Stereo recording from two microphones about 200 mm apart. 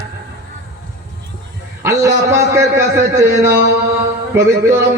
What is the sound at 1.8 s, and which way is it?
A man's voice, 15° right (ahead or behind).